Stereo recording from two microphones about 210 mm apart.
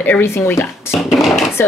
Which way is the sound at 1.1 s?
Centre (ahead or behind).